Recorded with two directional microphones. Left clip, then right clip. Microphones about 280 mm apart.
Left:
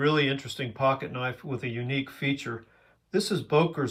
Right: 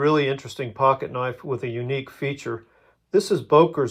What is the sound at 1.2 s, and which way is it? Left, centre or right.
Speech, right.